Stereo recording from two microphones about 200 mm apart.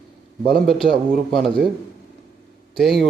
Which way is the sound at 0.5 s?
Centre (ahead or behind).